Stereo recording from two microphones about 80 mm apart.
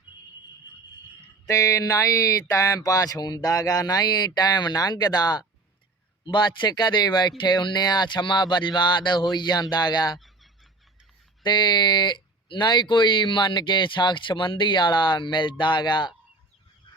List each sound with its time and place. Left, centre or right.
1.5 s speech: left
6.2 s speech: left
10.2 s fowl: centre
11.4 s speech: left